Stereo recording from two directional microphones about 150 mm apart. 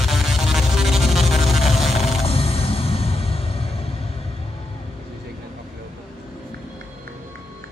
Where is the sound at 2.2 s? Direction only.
40° left (ahead or behind).